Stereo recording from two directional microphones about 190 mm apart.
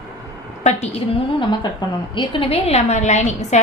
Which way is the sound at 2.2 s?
30° left (ahead or behind).